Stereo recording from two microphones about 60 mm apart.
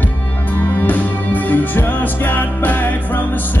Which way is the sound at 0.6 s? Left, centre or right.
Left.